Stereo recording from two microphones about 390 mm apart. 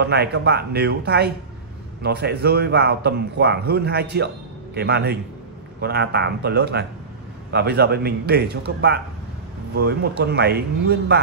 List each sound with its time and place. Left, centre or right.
0.0 s a man's voice: right